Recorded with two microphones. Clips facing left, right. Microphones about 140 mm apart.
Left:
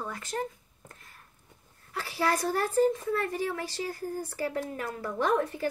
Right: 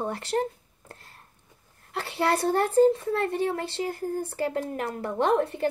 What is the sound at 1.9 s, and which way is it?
A woman's voice, 25° right (ahead or behind).